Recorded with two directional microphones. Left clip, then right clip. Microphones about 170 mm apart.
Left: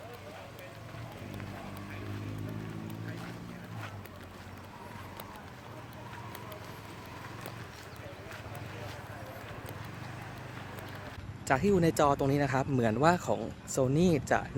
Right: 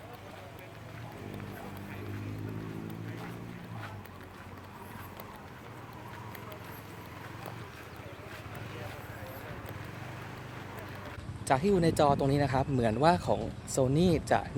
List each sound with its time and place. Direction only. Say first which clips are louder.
11.4 s speech: even; 15° left (ahead or behind)